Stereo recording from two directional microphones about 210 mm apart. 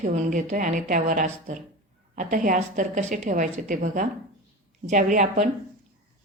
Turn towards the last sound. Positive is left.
turn(degrees=-40)  # may be behind; listen again after turning